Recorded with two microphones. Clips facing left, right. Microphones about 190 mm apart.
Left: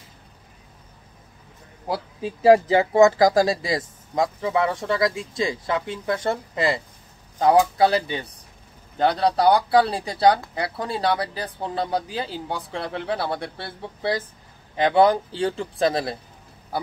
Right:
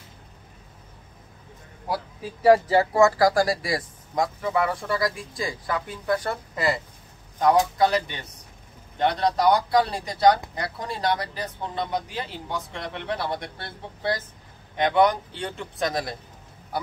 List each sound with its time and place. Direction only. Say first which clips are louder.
1.9 s speech: left 3 dB; 25° left (ahead or behind)